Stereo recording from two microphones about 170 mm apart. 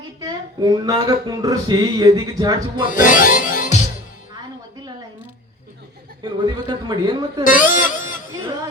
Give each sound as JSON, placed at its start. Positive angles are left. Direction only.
{"t": 0.2, "sound": "speech", "side_deg": -25}
{"t": 2.8, "sound": "music", "side_deg": 50}
{"t": 6.2, "sound": "speech", "side_deg": -25}
{"t": 7.4, "sound": "speech", "side_deg": 55}